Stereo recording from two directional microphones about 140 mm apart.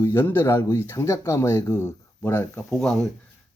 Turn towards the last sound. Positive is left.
turn(degrees=0)  # may be behind; listen again after turning